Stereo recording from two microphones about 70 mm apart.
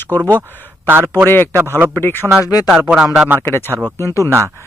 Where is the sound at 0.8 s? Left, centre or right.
Right.